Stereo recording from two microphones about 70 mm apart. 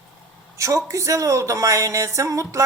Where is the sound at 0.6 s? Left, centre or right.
Right.